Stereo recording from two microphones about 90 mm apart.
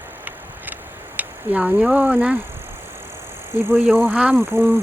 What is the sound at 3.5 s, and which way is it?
Speech, 30° right (ahead or behind).